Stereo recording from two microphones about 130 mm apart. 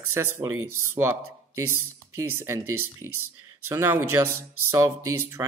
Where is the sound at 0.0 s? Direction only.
20° right (ahead or behind).